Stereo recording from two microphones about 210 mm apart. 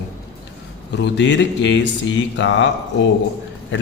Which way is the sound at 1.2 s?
60° left (ahead or behind).